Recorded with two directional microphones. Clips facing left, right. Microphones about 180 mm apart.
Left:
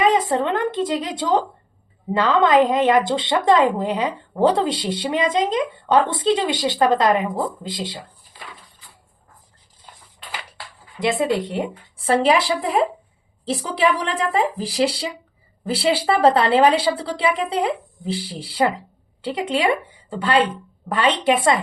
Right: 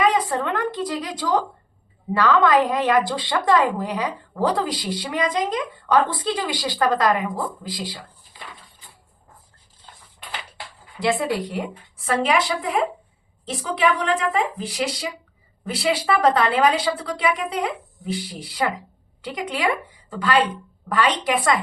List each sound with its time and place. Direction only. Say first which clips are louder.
0.0 s speech: left 3 dB; 25° left (ahead or behind)
11.0 s a woman's voice: left 2 dB; 20° left (ahead or behind)